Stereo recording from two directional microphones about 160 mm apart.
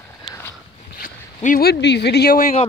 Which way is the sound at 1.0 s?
55° left (ahead or behind).